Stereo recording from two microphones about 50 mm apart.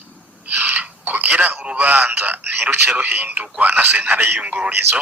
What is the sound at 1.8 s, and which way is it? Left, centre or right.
Speech, right.